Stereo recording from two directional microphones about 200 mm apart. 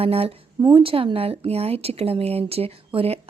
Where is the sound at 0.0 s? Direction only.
30° right (ahead or behind).